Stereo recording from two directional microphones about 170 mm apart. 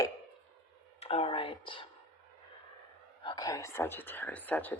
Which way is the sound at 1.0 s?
35° left (ahead or behind).